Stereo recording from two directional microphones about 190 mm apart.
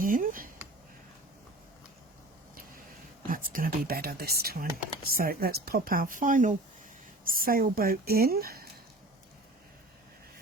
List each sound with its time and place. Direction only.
0.0 s speech: 45° right (ahead or behind)
3.2 s speech: 45° right (ahead or behind)